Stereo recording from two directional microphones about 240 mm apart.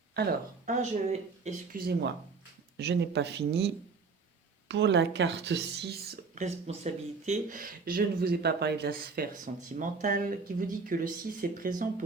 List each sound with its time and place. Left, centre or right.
0.1 s speech: right
4.7 s speech: right